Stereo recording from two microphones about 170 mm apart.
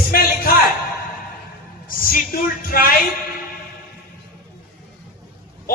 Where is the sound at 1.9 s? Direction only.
55° left (ahead or behind).